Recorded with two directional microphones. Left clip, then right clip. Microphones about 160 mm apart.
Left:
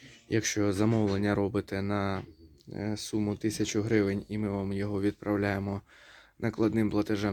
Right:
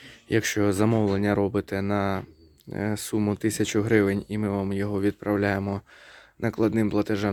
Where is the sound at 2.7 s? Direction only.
30° right (ahead or behind).